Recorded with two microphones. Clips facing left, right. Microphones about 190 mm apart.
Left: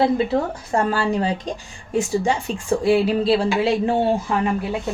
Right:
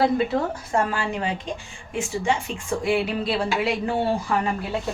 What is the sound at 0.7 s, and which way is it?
Speech, 35° left (ahead or behind).